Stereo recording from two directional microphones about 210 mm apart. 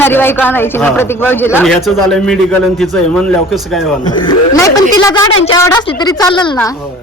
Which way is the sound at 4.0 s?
20° left (ahead or behind).